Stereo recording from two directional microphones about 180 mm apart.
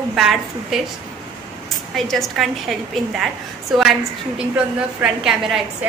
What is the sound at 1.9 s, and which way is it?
A woman's voice, centre (ahead or behind).